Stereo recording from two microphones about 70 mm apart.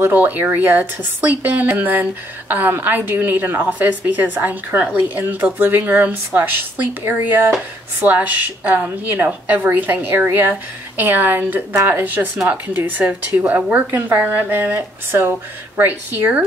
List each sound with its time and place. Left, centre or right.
0.0 s a woman's voice: right